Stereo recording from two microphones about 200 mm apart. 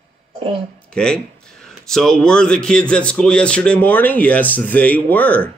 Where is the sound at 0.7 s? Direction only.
5° left (ahead or behind).